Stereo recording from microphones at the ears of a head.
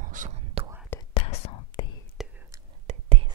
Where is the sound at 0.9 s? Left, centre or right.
Left.